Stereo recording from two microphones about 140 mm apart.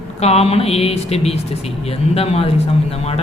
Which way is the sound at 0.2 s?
50° left (ahead or behind).